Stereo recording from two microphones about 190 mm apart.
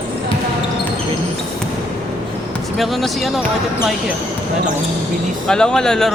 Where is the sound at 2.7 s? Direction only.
Centre (ahead or behind).